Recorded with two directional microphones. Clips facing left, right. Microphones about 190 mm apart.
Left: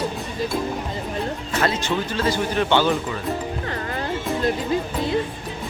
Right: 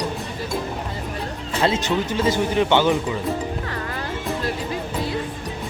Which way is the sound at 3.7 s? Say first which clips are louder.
Left 1 dB; 35° left (ahead or behind).